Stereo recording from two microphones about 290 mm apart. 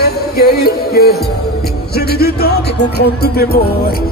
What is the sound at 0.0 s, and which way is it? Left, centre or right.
Music, left.